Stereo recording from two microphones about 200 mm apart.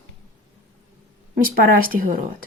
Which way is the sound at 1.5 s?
45° right (ahead or behind).